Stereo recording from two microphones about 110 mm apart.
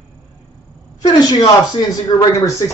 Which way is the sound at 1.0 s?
40° left (ahead or behind).